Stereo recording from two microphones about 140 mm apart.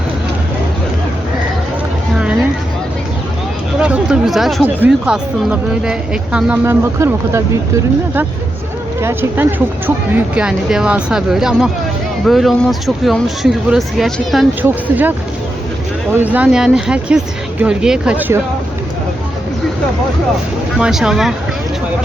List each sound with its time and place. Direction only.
3.8 s a sound: 10° right (ahead or behind)
4.6 s speech: 10° right (ahead or behind)
6.7 s speech: 20° right (ahead or behind)
9.0 s speech: 15° right (ahead or behind); by 14.4 s centre (ahead or behind)
14.6 s speech: 10° right (ahead or behind)
16.2 s speech: 10° right (ahead or behind)
20.7 s speech: 5° right (ahead or behind)